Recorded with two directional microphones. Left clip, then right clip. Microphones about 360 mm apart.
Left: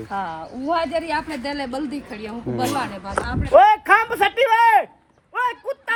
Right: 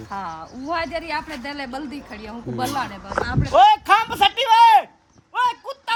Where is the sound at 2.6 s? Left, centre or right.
Centre.